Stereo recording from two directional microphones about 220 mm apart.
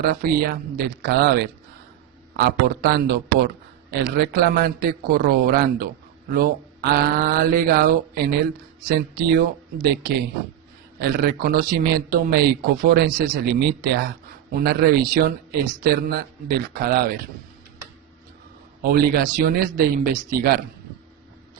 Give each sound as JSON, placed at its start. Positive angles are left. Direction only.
{"t": 0.0, "sound": "speech", "side_deg": -40}
{"t": 18.8, "sound": "speech", "side_deg": -40}